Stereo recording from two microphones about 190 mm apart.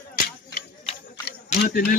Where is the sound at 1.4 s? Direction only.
45° left (ahead or behind).